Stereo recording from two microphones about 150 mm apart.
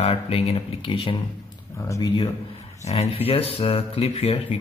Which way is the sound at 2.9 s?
40° left (ahead or behind).